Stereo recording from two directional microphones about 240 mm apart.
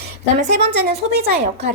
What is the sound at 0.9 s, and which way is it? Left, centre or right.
Speech, right.